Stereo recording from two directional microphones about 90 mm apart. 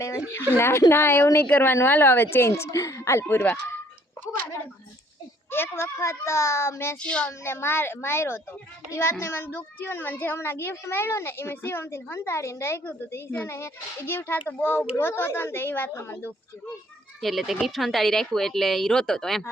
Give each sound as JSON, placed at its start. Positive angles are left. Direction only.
{"t": 0.3, "sound": "a child's voice", "side_deg": 30}
{"t": 5.5, "sound": "a child's voice", "side_deg": 25}
{"t": 7.0, "sound": "speech", "side_deg": 15}
{"t": 7.4, "sound": "a child's voice", "side_deg": 25}
{"t": 17.2, "sound": "speech", "side_deg": 0}